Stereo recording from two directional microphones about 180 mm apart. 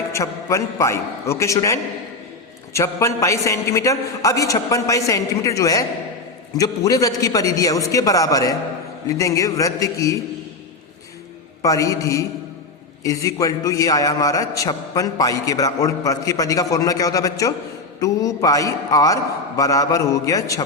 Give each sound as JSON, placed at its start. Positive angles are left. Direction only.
{"t": 0.1, "sound": "a man's voice", "side_deg": 15}
{"t": 11.6, "sound": "a man's voice", "side_deg": 20}